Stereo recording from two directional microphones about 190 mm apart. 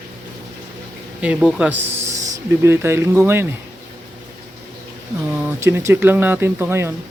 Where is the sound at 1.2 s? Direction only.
5° right (ahead or behind).